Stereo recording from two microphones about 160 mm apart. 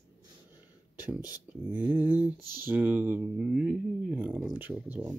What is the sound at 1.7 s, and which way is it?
Speech, 10° right (ahead or behind).